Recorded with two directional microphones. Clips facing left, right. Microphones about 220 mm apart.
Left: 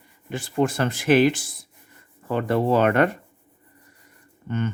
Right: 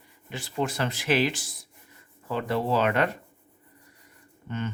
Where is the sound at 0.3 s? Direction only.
50° left (ahead or behind).